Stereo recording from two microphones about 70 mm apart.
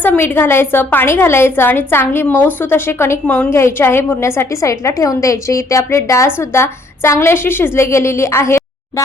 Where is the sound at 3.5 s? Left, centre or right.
Left.